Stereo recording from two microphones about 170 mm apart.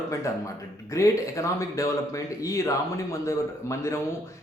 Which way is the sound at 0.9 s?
20° left (ahead or behind).